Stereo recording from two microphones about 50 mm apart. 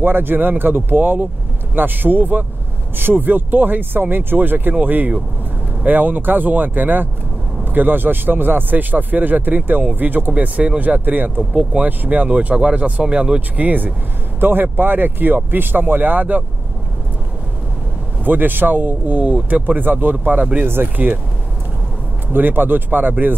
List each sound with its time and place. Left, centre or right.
0.0 s a man's voice: right
13.7 s a man's voice: right
18.2 s a man's voice: right
22.3 s a man's voice: right